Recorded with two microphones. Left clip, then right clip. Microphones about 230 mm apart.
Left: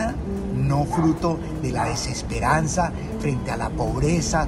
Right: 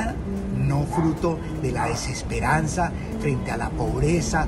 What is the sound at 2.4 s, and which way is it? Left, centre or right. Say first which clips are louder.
Speech: left 2 dB; centre.